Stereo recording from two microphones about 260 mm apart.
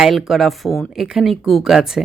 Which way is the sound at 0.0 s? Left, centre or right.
Centre.